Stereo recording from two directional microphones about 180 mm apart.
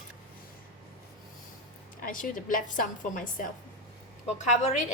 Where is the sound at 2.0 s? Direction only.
50° left (ahead or behind).